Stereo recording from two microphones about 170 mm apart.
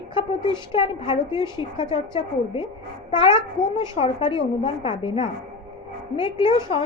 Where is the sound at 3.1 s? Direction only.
30° left (ahead or behind).